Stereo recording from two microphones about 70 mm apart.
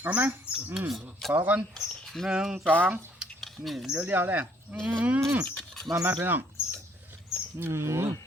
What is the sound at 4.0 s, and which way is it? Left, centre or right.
Speech, right.